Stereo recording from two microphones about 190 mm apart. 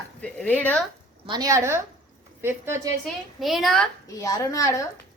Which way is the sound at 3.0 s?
Centre (ahead or behind).